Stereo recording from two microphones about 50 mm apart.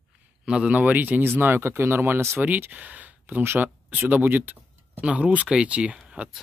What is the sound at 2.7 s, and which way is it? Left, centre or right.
Speech, right.